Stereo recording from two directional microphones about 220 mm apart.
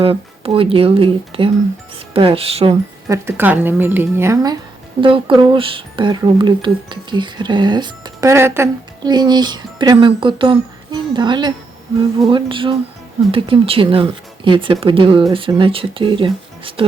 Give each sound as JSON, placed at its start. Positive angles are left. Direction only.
{"t": 0.0, "sound": "speech", "side_deg": -25}
{"t": 3.1, "sound": "speech", "side_deg": -10}
{"t": 4.9, "sound": "speech", "side_deg": -25}